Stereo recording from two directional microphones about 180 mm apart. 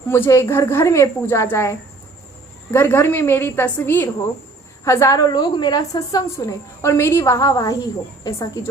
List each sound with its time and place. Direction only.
0.1 s a woman's voice: 15° left (ahead or behind)
2.7 s a woman's voice: 10° left (ahead or behind)